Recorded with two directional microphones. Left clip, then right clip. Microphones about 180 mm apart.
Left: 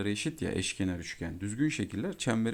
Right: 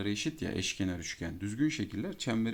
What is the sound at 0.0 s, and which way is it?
Speech, 30° left (ahead or behind).